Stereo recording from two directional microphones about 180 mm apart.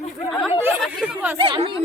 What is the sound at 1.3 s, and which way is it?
Speech, 30° right (ahead or behind).